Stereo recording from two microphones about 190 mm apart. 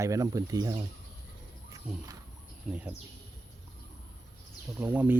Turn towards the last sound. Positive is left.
turn(degrees=-10)  # may be behind; listen again after turning